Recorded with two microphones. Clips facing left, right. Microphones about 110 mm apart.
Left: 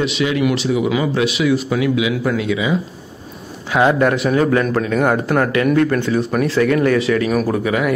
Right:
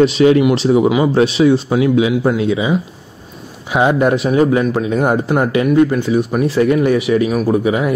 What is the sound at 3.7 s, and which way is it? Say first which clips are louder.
Speech: right 1 dB; 20° right (ahead or behind).